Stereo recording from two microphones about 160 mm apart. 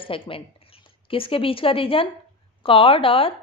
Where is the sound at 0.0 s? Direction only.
35° left (ahead or behind).